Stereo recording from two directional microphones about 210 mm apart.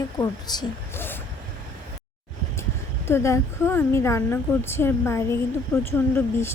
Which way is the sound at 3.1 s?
15° left (ahead or behind).